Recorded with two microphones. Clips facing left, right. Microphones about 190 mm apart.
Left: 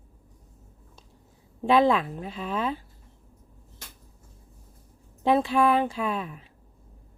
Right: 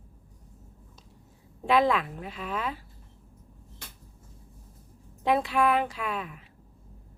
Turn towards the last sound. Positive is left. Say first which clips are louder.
# left 4 dB
turn(degrees=30)  # may be behind; listen again after turning